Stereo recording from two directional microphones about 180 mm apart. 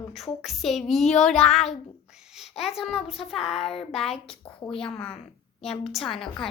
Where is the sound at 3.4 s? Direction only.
35° left (ahead or behind).